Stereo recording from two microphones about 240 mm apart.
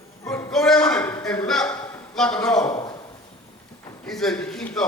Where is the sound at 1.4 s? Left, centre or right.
Centre.